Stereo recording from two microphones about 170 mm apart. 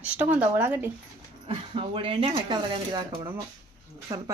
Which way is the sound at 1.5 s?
30° right (ahead or behind).